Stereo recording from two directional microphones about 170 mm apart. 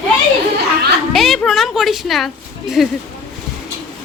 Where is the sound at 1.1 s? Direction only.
Centre (ahead or behind).